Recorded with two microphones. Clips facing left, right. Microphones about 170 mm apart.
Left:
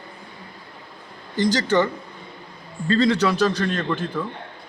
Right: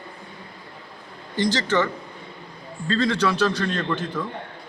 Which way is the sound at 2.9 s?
10° left (ahead or behind).